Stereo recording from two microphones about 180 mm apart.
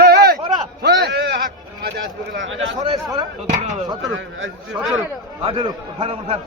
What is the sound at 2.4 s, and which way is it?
Speech, 90° right.